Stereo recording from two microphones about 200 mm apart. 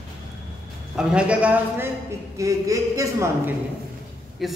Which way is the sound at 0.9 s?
5° right (ahead or behind).